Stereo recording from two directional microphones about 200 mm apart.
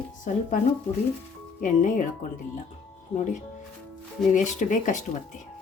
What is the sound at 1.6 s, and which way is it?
Speech, 40° left (ahead or behind).